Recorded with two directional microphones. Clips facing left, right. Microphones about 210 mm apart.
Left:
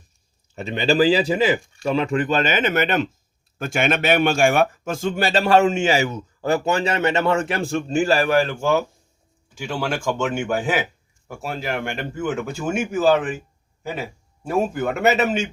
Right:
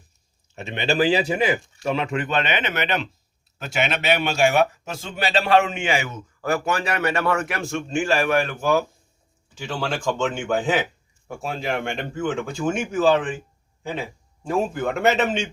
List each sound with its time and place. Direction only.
0.5 s speech: 35° left (ahead or behind)
9.6 s speech: 10° left (ahead or behind)